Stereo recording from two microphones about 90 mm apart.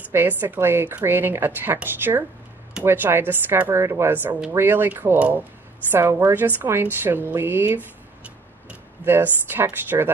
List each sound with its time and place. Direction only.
0.1 s a woman's voice: 25° right (ahead or behind)